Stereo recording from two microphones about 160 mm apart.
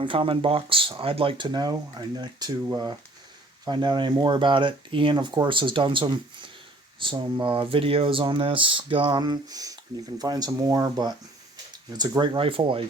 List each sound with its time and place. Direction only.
0.0 s speech: 30° right (ahead or behind)
3.7 s speech: 30° right (ahead or behind)